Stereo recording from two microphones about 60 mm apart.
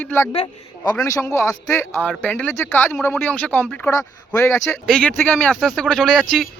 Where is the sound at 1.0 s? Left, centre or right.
Left.